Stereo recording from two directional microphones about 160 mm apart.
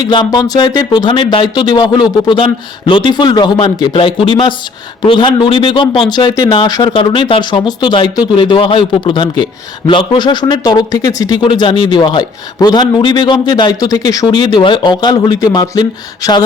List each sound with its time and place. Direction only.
0.0 s a man's voice: 25° left (ahead or behind)